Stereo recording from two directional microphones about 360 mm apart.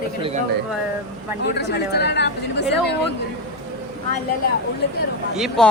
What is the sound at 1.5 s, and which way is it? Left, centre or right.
Speech, left.